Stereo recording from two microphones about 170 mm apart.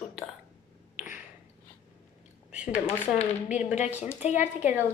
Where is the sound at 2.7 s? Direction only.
35° left (ahead or behind).